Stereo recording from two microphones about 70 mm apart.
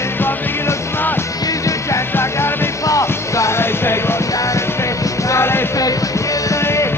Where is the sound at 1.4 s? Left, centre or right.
Left.